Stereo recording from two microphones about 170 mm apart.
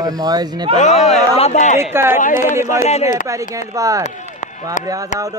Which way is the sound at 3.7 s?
20° right (ahead or behind).